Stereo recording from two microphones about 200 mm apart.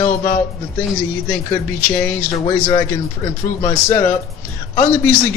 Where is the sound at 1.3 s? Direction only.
10° left (ahead or behind).